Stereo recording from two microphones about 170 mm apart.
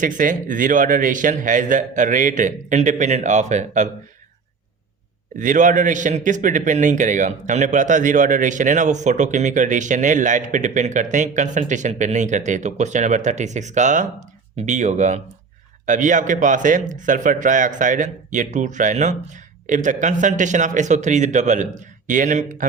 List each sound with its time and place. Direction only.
0.0 s a man's voice: 50° right (ahead or behind)
5.4 s a man's voice: 50° right (ahead or behind)